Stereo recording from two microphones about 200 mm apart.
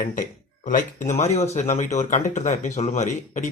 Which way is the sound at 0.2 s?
40° left (ahead or behind).